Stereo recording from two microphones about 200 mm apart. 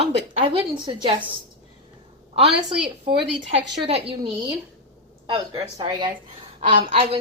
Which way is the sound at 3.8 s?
30° right (ahead or behind).